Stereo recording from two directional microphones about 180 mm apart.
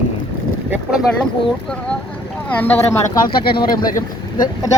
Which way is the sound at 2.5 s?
10° left (ahead or behind).